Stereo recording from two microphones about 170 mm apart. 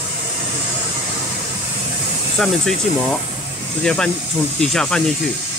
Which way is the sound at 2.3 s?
5° left (ahead or behind).